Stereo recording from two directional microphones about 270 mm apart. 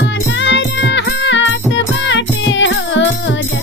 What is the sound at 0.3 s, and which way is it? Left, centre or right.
Music, left.